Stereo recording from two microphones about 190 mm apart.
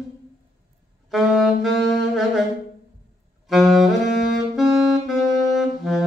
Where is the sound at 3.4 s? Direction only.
Centre (ahead or behind).